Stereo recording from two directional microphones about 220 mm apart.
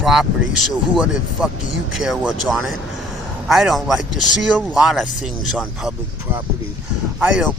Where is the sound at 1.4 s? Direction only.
5° right (ahead or behind).